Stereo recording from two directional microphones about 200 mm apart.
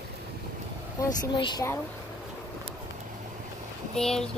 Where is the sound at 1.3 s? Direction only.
20° left (ahead or behind).